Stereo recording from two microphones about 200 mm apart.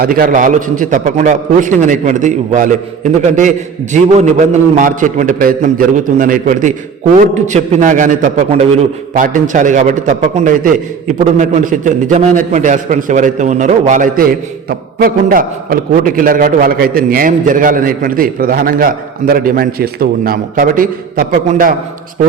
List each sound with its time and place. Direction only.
0.0 s a man's voice: 45° right (ahead or behind)